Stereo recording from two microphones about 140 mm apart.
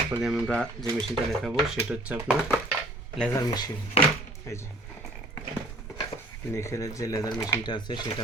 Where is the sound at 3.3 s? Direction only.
30° left (ahead or behind).